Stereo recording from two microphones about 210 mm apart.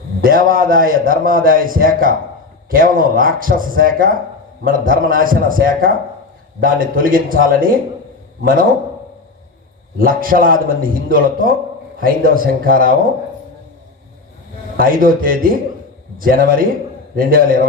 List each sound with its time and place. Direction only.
0.3 s a man's voice: 40° right (ahead or behind)
10.0 s a man's voice: 40° right (ahead or behind)
14.8 s a man's voice: 40° right (ahead or behind)